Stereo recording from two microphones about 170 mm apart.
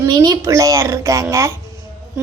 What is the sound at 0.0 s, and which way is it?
A woman's voice, 25° right (ahead or behind).